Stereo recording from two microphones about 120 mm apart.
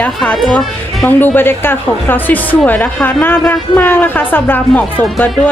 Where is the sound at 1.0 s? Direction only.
15° left (ahead or behind).